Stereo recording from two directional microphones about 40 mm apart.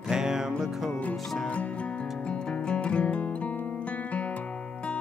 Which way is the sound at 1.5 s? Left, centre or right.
Left.